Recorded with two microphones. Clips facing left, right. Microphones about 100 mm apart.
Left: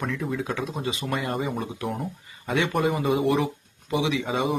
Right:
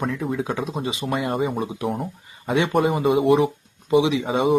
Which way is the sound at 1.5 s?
20° right (ahead or behind).